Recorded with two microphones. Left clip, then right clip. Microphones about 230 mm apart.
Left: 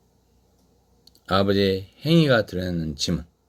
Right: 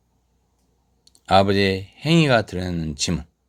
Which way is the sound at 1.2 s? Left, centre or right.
Right.